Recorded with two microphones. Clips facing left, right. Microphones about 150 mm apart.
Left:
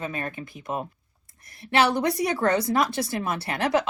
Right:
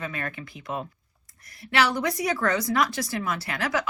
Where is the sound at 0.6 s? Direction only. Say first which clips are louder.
Left 2 dB; 50° left (ahead or behind).